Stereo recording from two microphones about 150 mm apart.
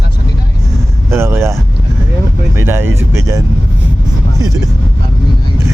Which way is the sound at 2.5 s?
15° right (ahead or behind).